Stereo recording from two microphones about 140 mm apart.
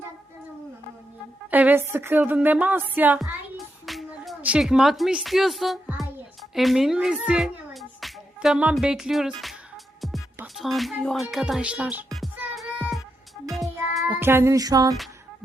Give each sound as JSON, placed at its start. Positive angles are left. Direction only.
{"t": 1.5, "sound": "speech", "side_deg": -10}
{"t": 3.8, "sound": "music", "side_deg": 0}
{"t": 10.4, "sound": "music", "side_deg": 0}
{"t": 14.1, "sound": "music", "side_deg": -15}